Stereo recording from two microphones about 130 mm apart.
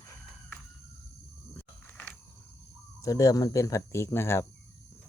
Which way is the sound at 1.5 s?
10° left (ahead or behind).